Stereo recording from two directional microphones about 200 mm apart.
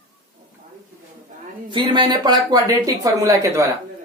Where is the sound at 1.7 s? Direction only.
20° right (ahead or behind).